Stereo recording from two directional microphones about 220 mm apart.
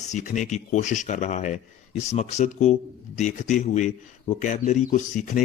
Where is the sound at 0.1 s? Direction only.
35° left (ahead or behind).